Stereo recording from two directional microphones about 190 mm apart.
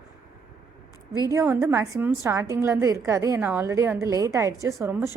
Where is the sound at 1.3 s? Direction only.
15° right (ahead or behind).